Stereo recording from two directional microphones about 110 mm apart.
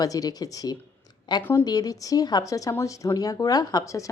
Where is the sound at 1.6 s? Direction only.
35° left (ahead or behind).